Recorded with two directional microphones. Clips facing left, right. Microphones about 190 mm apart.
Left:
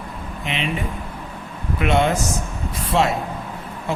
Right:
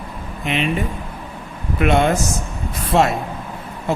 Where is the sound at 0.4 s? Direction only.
50° right (ahead or behind).